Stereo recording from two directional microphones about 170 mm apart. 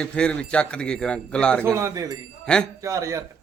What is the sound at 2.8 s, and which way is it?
Speech, 20° right (ahead or behind).